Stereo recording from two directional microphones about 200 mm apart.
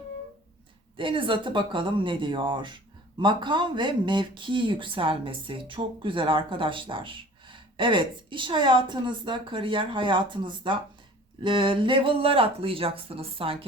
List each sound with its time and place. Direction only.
0.9 s speech: 25° right (ahead or behind)